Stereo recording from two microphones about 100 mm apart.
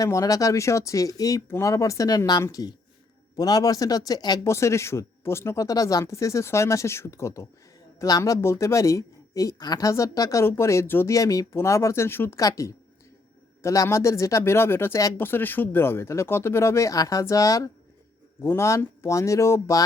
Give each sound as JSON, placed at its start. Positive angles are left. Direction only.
{"t": 0.0, "sound": "speech", "side_deg": 35}
{"t": 4.4, "sound": "speech", "side_deg": 30}
{"t": 11.1, "sound": "speech", "side_deg": 35}
{"t": 12.4, "sound": "speech", "side_deg": 35}